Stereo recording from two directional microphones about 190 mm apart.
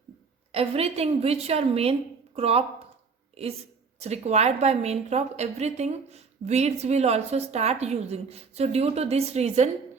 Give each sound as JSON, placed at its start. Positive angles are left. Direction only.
{"t": 0.5, "sound": "a woman's voice", "side_deg": -30}
{"t": 4.0, "sound": "a woman's voice", "side_deg": -35}